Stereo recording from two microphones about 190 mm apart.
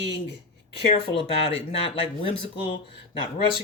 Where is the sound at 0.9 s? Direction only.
30° left (ahead or behind).